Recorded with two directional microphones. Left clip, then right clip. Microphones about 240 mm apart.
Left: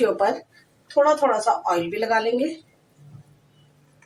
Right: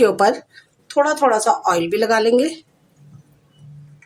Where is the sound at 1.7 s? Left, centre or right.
Right.